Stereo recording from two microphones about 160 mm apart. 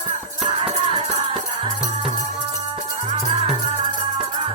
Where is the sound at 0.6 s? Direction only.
35° right (ahead or behind).